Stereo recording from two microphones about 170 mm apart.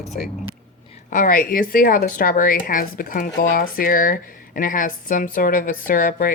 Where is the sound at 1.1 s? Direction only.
55° left (ahead or behind).